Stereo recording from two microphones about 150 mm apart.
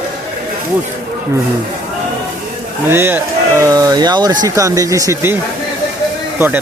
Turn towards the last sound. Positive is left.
turn(degrees=-10)  # may be behind; listen again after turning